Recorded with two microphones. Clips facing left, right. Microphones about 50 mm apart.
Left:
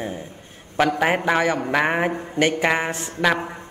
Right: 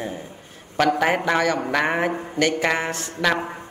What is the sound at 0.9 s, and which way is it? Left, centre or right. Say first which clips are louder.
A man's voice: left 1 dB; centre.